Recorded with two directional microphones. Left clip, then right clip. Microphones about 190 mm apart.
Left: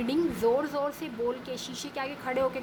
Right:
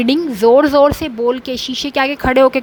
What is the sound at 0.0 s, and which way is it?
A woman's voice, 45° right (ahead or behind).